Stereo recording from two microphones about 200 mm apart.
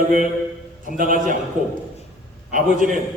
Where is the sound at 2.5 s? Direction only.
40° right (ahead or behind).